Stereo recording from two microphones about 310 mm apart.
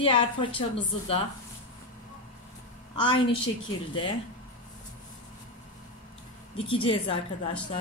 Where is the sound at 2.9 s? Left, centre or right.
Centre.